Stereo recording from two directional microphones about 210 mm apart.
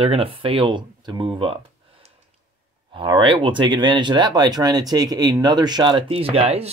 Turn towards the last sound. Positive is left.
turn(degrees=-30)  # may be behind; listen again after turning